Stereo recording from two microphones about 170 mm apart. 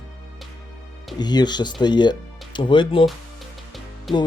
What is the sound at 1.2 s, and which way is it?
Speech, 25° left (ahead or behind).